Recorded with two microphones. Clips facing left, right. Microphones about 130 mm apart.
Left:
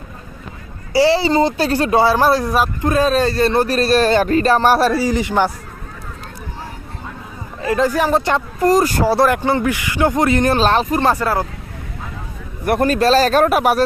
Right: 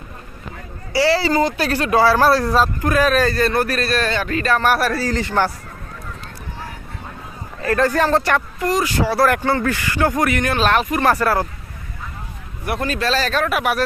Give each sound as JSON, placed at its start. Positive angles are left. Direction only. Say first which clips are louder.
{"t": 0.9, "sound": "speech", "louder": "left 3 dB", "side_deg": 25}
{"t": 2.9, "sound": "speech", "louder": "left 2 dB", "side_deg": 25}
{"t": 4.9, "sound": "speech", "louder": "left 4 dB", "side_deg": 15}
{"t": 7.6, "sound": "speech", "louder": "left 1 dB", "side_deg": 15}
{"t": 8.5, "sound": "speech", "louder": "left 5 dB", "side_deg": 40}
{"t": 9.1, "sound": "speech", "louder": "even", "side_deg": 20}
{"t": 11.1, "sound": "speech", "louder": "even", "side_deg": 20}
{"t": 12.6, "sound": "speech", "louder": "left 7 dB", "side_deg": 45}